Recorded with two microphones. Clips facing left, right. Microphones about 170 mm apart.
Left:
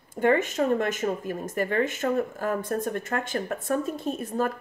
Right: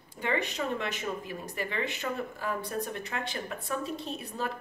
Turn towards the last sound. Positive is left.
turn(degrees=45)  # may be behind; listen again after turning